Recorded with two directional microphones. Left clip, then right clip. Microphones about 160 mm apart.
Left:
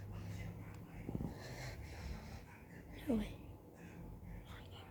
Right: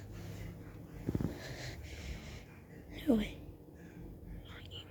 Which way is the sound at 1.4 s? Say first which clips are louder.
Right 4 dB; 20° right (ahead or behind).